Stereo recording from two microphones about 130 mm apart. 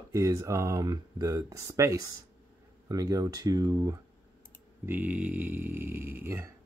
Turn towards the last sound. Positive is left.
turn(degrees=-20)  # may be behind; listen again after turning